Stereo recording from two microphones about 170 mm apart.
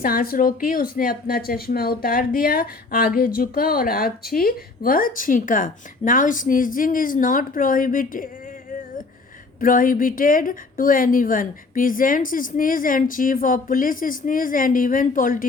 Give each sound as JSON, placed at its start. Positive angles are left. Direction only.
{"t": 0.0, "sound": "speech", "side_deg": 60}
{"t": 9.6, "sound": "a woman's voice", "side_deg": 55}